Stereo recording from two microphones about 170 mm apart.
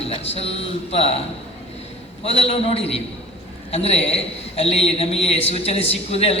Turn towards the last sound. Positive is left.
turn(degrees=35)  # may be behind; listen again after turning